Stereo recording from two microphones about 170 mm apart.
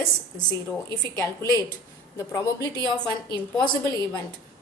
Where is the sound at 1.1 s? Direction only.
20° left (ahead or behind).